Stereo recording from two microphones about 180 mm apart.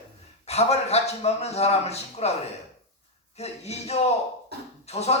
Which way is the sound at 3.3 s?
35° left (ahead or behind).